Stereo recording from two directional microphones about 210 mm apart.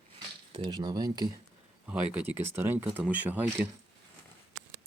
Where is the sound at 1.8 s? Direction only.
5° right (ahead or behind).